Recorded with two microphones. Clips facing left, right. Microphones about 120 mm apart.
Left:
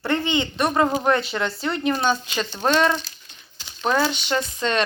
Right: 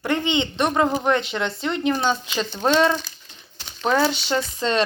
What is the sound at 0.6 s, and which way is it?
Speech, 5° left (ahead or behind).